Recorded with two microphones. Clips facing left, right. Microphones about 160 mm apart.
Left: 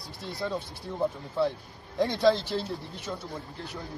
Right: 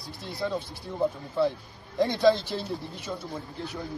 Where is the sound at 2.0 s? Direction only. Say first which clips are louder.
Right 2 dB; centre (ahead or behind).